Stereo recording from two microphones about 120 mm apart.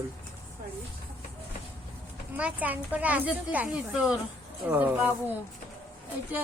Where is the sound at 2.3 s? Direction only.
10° right (ahead or behind).